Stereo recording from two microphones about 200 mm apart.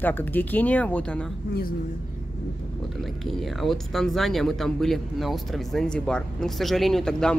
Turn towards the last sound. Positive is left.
turn(degrees=0)  # may be behind; listen again after turning